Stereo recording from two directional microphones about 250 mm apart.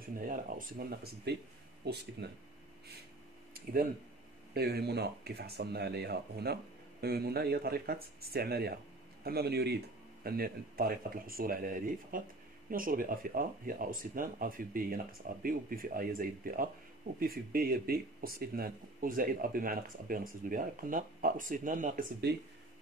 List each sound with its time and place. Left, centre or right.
0.1 s speech: right
4.6 s speech: right